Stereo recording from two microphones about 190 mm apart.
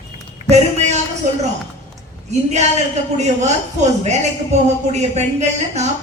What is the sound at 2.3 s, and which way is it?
Speech, 35° right (ahead or behind).